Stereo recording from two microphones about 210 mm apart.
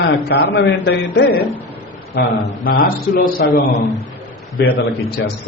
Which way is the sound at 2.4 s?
40° left (ahead or behind).